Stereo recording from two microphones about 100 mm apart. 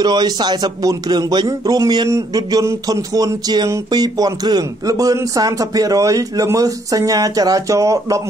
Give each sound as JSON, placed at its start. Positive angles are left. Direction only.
{"t": 0.0, "sound": "speech", "side_deg": -45}
{"t": 1.5, "sound": "speech", "side_deg": -35}